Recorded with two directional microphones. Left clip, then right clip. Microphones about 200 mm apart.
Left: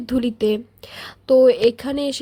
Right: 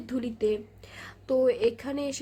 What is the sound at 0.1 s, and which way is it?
A woman's voice, 50° left (ahead or behind).